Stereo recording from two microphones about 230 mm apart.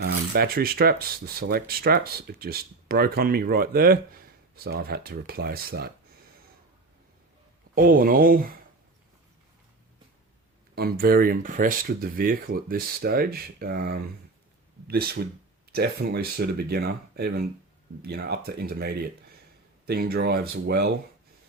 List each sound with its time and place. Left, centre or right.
0.0 s speech: right
7.8 s speech: right
10.8 s speech: right